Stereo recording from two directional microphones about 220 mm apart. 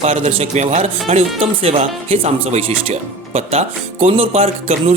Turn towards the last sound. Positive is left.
turn(degrees=-25)  # may be behind; listen again after turning